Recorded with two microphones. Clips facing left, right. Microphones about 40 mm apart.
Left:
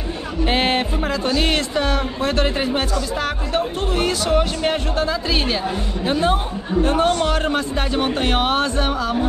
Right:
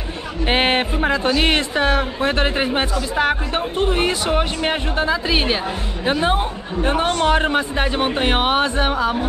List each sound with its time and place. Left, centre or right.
0.5 s speech: right